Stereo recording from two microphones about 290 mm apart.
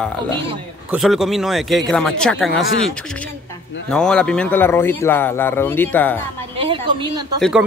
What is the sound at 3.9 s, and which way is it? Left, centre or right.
Speech, centre.